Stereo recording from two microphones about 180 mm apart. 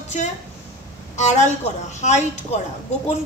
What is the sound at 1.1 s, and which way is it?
A woman's voice, 40° left (ahead or behind).